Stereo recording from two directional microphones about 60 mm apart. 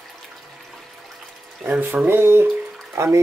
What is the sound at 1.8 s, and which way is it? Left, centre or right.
Speech, right.